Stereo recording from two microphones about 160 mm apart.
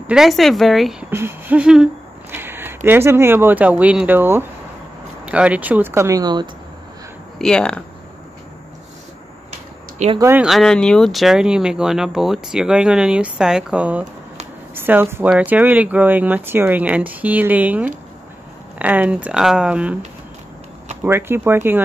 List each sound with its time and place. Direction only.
0.0 s speech: 5° right (ahead or behind)
1.1 s speech: 10° right (ahead or behind)
7.3 s speech: 5° left (ahead or behind)
10.1 s speech: 15° right (ahead or behind)
10.4 s speech: centre (ahead or behind)
21.0 s speech: 15° right (ahead or behind)